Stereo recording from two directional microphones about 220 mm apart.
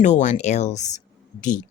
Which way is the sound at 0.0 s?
35° left (ahead or behind).